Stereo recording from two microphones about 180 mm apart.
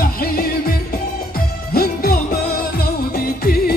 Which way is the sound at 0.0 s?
55° left (ahead or behind).